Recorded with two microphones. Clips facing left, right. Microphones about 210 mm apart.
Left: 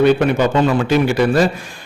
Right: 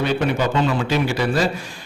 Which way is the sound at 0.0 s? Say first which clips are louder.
Left 7 dB; 55° left (ahead or behind).